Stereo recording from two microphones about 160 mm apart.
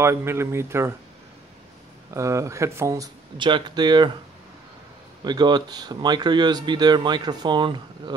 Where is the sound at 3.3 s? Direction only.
30° right (ahead or behind).